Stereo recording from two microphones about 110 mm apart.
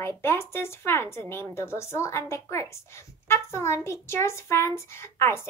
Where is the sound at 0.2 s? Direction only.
20° left (ahead or behind).